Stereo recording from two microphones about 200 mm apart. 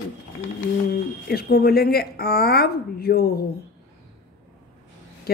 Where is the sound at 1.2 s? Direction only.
50° left (ahead or behind).